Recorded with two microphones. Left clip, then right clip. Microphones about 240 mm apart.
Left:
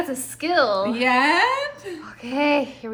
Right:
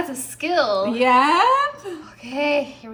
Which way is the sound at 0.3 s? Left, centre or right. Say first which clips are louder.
Even; left.